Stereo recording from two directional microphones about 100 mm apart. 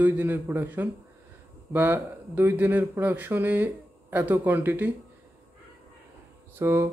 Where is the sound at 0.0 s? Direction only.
20° right (ahead or behind).